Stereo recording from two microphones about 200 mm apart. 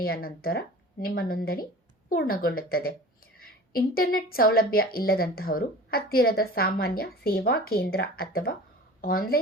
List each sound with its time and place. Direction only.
0.0 s a woman's voice: 50° left (ahead or behind)